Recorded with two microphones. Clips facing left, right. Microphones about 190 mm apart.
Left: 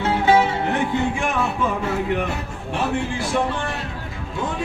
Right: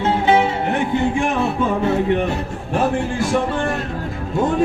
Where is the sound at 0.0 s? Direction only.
20° right (ahead or behind).